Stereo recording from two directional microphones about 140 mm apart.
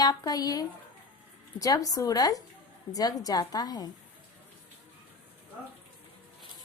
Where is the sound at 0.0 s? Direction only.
25° left (ahead or behind).